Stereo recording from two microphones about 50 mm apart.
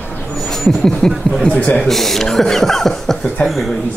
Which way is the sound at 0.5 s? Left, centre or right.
Centre.